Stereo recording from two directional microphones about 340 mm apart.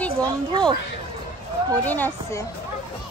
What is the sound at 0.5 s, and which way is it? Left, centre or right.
Speech, centre.